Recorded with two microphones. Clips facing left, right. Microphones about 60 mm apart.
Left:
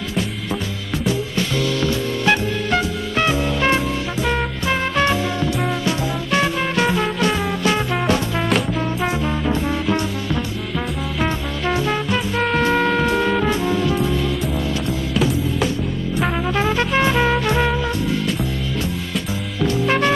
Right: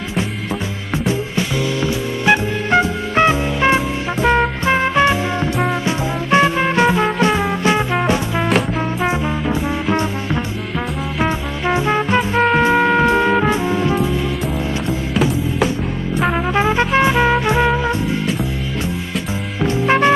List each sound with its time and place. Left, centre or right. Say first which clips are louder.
1.0 s music: right 1 dB; centre
2.8 s music: right 5 dB; right
11.1 s music: right 3 dB; centre
16.4 s music: right 3 dB; right
19.6 s music: right 3 dB; right